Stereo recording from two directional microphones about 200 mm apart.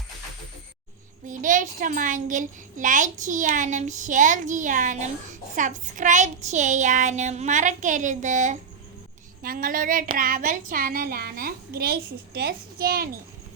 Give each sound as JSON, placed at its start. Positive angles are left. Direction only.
{"t": 1.3, "sound": "a child's voice", "side_deg": -40}